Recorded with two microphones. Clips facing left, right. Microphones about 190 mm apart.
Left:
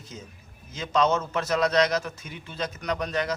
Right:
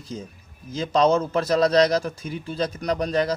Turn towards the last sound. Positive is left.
turn(degrees=-35)  # may be behind; listen again after turning